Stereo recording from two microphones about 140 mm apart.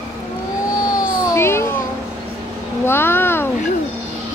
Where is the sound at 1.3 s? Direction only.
20° left (ahead or behind).